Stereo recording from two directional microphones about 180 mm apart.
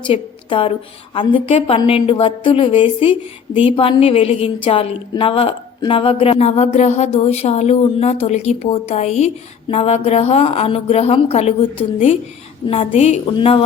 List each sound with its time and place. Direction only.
0.1 s a woman's voice: 30° left (ahead or behind)